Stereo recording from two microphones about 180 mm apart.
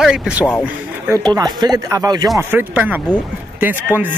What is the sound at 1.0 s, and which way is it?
Speech, 20° right (ahead or behind).